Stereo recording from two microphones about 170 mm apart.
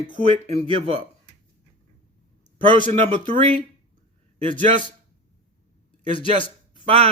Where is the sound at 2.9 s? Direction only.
35° right (ahead or behind).